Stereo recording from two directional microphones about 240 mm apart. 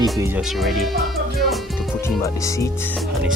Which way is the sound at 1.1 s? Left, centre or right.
Centre.